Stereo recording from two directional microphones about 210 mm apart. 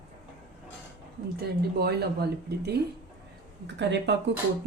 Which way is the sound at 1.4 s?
50° right (ahead or behind).